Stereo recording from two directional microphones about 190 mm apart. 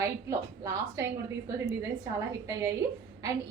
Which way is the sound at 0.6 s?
15° right (ahead or behind).